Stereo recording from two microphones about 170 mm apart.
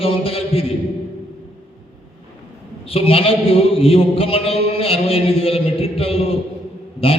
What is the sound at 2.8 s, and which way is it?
A man's voice, 35° left (ahead or behind).